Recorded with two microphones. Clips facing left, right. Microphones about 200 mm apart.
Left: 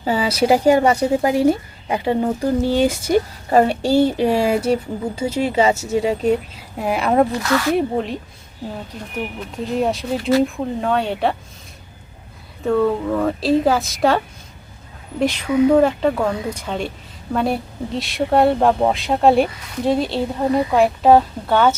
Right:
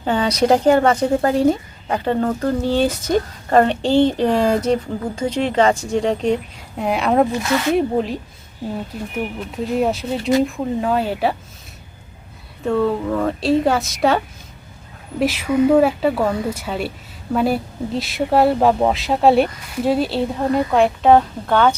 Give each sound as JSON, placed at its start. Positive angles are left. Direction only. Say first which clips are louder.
{"t": 0.0, "sound": "speech", "louder": "right 1 dB", "side_deg": 5}
{"t": 7.3, "sound": "speech", "louder": "even", "side_deg": -20}
{"t": 7.7, "sound": "speech", "louder": "right 1 dB", "side_deg": 0}
{"t": 12.6, "sound": "speech", "louder": "left 1 dB", "side_deg": 0}
{"t": 15.2, "sound": "speech", "louder": "even", "side_deg": -5}